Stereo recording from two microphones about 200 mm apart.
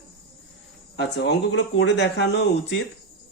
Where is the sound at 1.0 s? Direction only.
60° left (ahead or behind).